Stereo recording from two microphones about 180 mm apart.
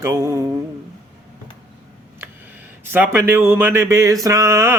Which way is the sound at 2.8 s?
10° right (ahead or behind).